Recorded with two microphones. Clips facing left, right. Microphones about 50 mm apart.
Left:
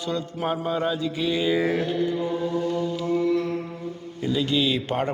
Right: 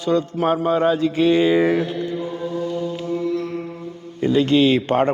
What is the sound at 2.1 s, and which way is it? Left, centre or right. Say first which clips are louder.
Chant: even; centre.